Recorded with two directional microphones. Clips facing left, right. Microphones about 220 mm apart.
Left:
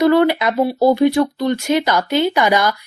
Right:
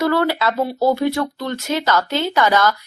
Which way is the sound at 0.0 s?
20° left (ahead or behind).